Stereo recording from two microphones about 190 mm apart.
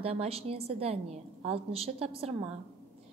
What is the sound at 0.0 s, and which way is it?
A woman's voice, 30° right (ahead or behind).